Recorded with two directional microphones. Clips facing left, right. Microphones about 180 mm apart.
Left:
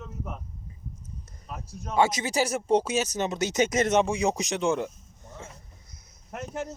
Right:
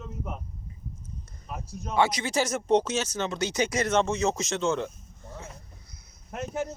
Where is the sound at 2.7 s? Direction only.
10° left (ahead or behind).